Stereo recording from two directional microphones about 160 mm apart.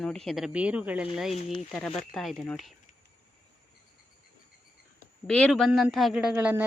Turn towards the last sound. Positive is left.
turn(degrees=-10)  # may be behind; listen again after turning